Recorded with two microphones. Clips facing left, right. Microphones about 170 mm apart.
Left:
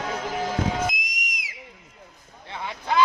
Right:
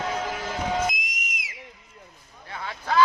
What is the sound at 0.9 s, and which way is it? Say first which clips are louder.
Whistle: even; centre (ahead or behind).